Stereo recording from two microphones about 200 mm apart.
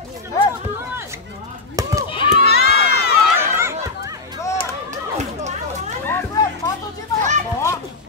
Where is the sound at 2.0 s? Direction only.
25° left (ahead or behind).